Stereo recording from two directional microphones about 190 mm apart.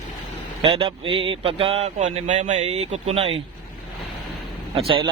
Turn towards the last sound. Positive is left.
turn(degrees=-30)  # may be behind; listen again after turning